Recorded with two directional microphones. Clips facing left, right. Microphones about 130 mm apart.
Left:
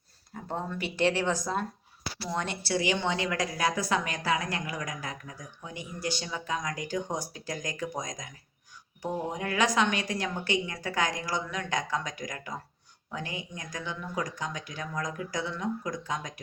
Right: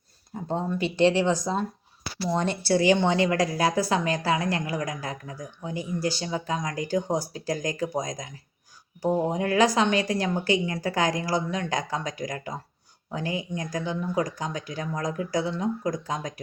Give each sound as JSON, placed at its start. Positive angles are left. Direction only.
{"t": 0.3, "sound": "a sound", "side_deg": -25}
{"t": 0.7, "sound": "speech", "side_deg": -25}
{"t": 2.3, "sound": "a woman's voice", "side_deg": -30}